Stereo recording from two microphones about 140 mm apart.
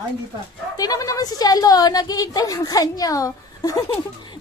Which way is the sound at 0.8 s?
25° left (ahead or behind).